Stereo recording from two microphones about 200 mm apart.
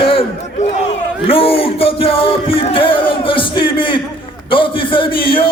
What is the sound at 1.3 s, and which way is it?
Music, 30° left (ahead or behind).